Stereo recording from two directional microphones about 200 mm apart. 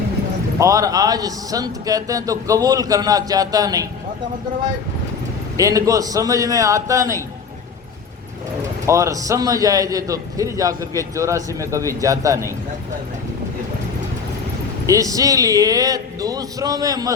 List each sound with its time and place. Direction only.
0.6 s a man's voice: 15° right (ahead or behind)
5.5 s a man's voice: 15° right (ahead or behind)
8.9 s a man's voice: 15° right (ahead or behind)
14.8 s a man's voice: 15° right (ahead or behind)